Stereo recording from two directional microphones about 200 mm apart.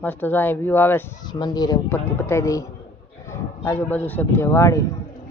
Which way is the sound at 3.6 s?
10° left (ahead or behind).